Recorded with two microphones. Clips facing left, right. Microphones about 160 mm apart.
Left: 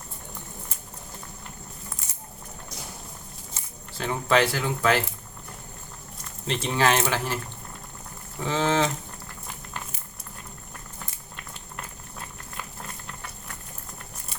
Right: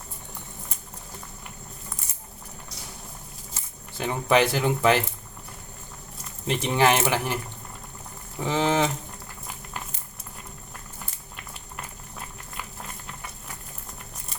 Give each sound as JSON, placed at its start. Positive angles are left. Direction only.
{"t": 3.9, "sound": "speech", "side_deg": -15}
{"t": 6.5, "sound": "speech", "side_deg": -15}
{"t": 8.4, "sound": "speech", "side_deg": -15}